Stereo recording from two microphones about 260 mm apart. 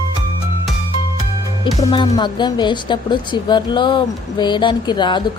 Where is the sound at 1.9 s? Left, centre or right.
Centre.